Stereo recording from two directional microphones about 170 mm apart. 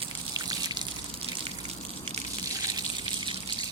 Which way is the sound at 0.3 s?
25° right (ahead or behind).